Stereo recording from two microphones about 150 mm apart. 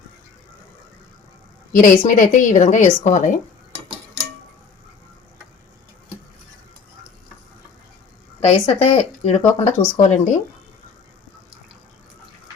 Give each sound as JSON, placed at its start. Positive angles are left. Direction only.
{"t": 1.7, "sound": "a woman's voice", "side_deg": 60}
{"t": 8.4, "sound": "speech", "side_deg": 45}